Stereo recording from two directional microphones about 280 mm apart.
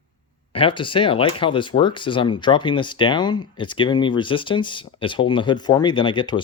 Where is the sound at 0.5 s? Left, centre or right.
Centre.